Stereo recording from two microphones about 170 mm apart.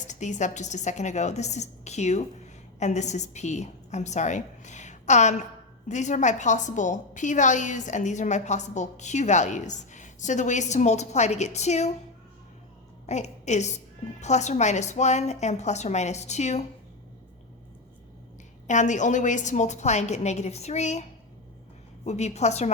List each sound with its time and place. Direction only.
0.1 s a woman's voice: 45° left (ahead or behind)
13.1 s a woman's voice: 40° left (ahead or behind)
18.7 s a woman's voice: 45° left (ahead or behind)